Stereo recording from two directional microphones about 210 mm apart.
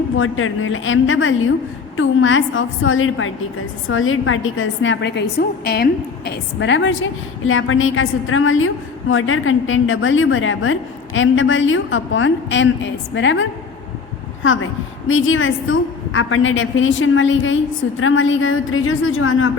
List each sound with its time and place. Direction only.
0.2 s a woman's voice: 75° left (ahead or behind)